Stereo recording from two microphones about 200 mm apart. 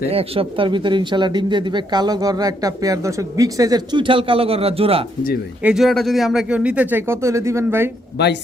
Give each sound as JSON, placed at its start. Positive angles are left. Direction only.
{"t": 0.1, "sound": "speech", "side_deg": -30}
{"t": 5.6, "sound": "speech", "side_deg": 0}
{"t": 8.2, "sound": "speech", "side_deg": 55}